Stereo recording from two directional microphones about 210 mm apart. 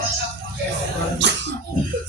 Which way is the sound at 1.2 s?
55° right (ahead or behind).